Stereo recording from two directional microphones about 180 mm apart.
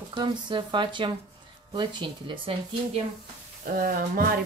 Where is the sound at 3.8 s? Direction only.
55° right (ahead or behind).